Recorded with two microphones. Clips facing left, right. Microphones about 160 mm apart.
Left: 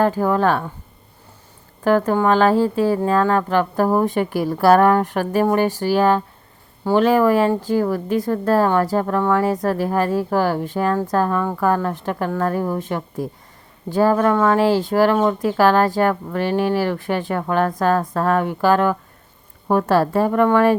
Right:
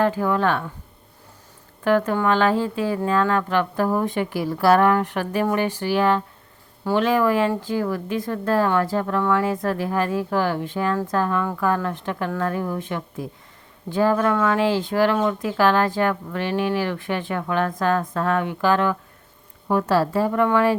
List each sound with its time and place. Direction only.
0.0 s speech: 40° left (ahead or behind)
1.8 s a woman's voice: 40° left (ahead or behind)